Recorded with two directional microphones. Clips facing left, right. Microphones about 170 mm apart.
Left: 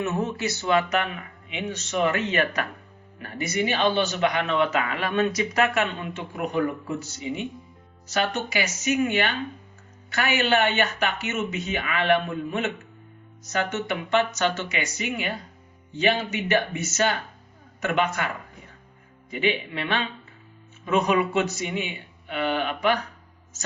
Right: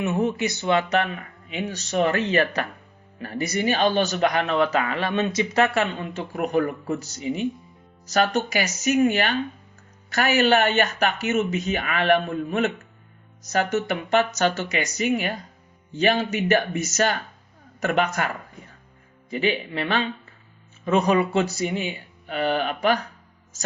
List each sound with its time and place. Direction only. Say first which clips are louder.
0.0 s speech: right 3 dB; 15° right (ahead or behind); by 18.3 s 40° right (ahead or behind)
19.3 s speech: right 1 dB; 40° right (ahead or behind)